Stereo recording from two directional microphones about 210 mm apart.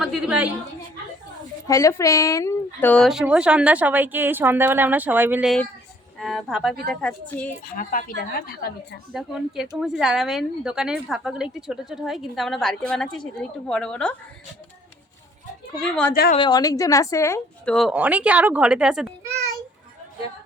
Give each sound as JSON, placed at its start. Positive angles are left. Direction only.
{"t": 0.0, "sound": "a woman's voice", "side_deg": -5}
{"t": 1.6, "sound": "a woman's voice", "side_deg": 15}
{"t": 7.6, "sound": "a woman's voice", "side_deg": 40}
{"t": 9.1, "sound": "speech", "side_deg": 0}
{"t": 15.9, "sound": "speech", "side_deg": 5}
{"t": 16.3, "sound": "a woman's voice", "side_deg": 20}
{"t": 17.7, "sound": "speech", "side_deg": -5}